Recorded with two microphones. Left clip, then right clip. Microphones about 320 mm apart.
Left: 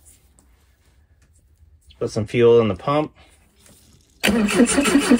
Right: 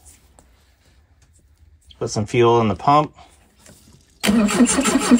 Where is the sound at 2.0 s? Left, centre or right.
Centre.